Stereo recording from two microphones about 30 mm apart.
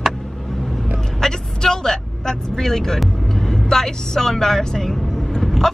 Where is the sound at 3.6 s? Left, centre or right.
Centre.